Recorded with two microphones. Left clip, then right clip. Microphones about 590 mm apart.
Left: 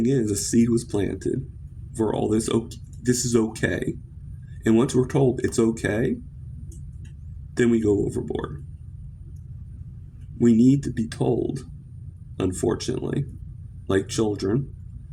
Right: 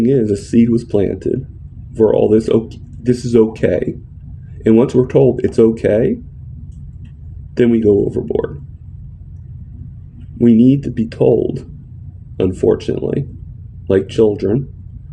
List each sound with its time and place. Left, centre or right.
0.1 s speech: left
7.5 s speech: left
10.3 s speech: left